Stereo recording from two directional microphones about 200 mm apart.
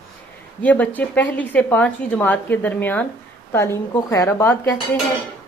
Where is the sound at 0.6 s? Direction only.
5° left (ahead or behind).